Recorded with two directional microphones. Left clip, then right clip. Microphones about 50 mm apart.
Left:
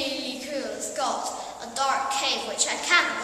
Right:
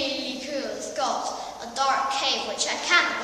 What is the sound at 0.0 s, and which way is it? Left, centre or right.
A woman's voice, centre.